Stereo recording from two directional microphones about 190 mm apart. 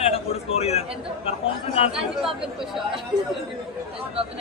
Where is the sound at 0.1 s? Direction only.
30° left (ahead or behind).